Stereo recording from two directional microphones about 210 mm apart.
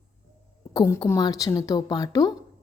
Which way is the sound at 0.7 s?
15° left (ahead or behind).